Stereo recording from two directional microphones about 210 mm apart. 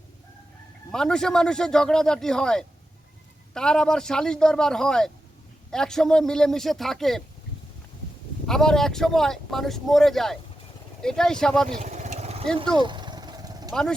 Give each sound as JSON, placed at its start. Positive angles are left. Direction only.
{"t": 0.9, "sound": "speech", "side_deg": 5}
{"t": 8.4, "sound": "speech", "side_deg": 0}
{"t": 11.8, "sound": "vehicle", "side_deg": -35}